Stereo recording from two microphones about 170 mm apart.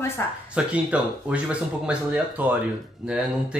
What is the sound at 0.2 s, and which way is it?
Speech, 15° left (ahead or behind).